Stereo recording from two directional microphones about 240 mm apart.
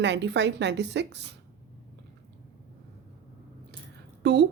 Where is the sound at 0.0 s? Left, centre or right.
Right.